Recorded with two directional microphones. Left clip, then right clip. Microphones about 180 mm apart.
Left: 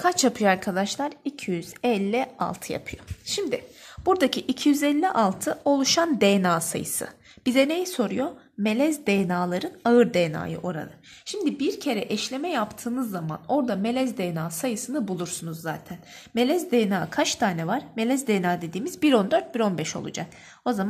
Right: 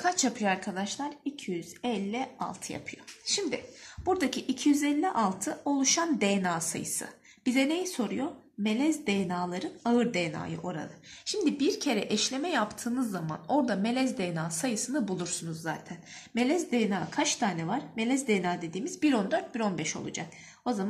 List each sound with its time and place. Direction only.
0.0 s speech: 60° left (ahead or behind)
11.2 s a woman's voice: 35° left (ahead or behind)
16.3 s speech: 55° left (ahead or behind)